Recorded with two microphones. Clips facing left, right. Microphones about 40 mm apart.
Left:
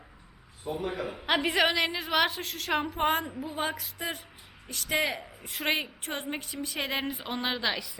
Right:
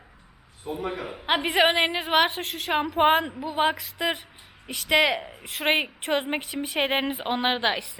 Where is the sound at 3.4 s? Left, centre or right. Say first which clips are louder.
Right 8 dB; right.